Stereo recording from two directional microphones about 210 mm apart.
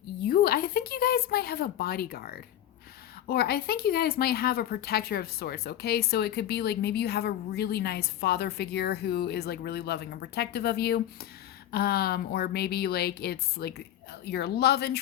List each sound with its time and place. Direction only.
0.3 s speech: 45° left (ahead or behind)